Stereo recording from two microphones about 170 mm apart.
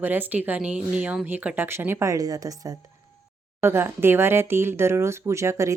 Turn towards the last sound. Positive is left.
turn(degrees=-15)  # may be behind; listen again after turning